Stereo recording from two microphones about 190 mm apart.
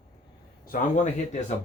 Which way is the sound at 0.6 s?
45° left (ahead or behind).